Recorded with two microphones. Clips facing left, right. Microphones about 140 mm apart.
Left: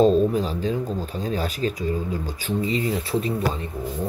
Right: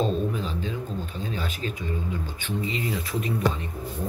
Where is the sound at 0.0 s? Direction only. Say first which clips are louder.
Left 9 dB; 35° left (ahead or behind).